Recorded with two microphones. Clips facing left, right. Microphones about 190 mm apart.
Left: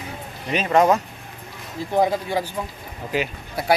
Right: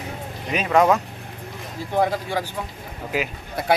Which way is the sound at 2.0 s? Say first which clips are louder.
Left 2 dB; 15° left (ahead or behind).